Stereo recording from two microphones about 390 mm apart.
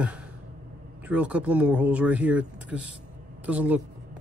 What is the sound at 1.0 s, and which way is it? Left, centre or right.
Speech, centre.